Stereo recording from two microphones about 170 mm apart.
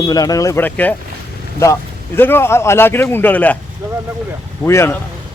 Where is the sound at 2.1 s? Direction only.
15° left (ahead or behind).